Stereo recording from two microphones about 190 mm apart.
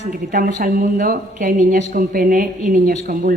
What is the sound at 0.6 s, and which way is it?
A woman's voice, 45° right (ahead or behind).